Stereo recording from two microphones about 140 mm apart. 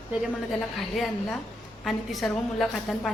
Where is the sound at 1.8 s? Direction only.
Centre (ahead or behind).